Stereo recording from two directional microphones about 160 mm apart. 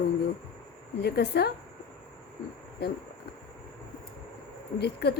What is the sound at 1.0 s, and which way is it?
Speech, 90° left.